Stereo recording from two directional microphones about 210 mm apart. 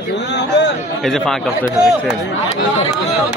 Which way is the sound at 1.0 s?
Centre (ahead or behind).